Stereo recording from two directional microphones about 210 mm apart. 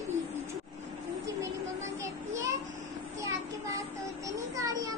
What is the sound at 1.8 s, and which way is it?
Children playing, 15° right (ahead or behind).